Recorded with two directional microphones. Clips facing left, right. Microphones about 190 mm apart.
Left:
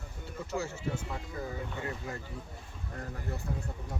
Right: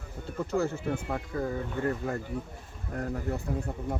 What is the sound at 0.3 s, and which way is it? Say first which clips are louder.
Speech: right 7 dB; 55° right (ahead or behind).